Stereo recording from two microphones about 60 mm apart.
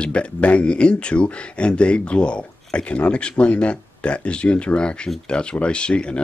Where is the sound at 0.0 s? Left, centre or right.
Centre.